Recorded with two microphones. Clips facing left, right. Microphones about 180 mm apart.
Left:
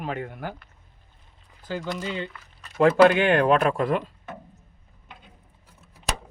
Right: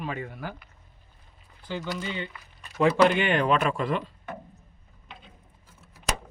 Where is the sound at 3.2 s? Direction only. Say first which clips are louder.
Left 4 dB; 50° left (ahead or behind).